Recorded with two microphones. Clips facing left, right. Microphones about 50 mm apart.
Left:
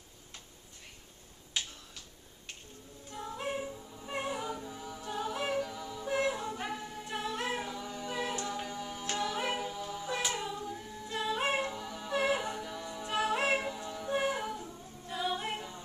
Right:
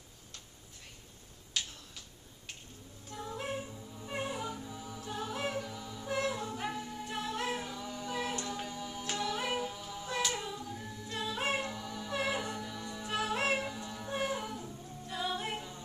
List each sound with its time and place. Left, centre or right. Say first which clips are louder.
1.6 s a sound: left 1 dB; centre
3.1 s music: left 1 dB; centre
4.5 s a capella: left 2 dB; centre
8.5 s tick-tock: left 2 dB; centre
9.1 s music: left 1 dB; centre
10.4 s a capella: left 3 dB; centre
13.1 s music: left 2 dB; centre
13.8 s a capella: left 3 dB; centre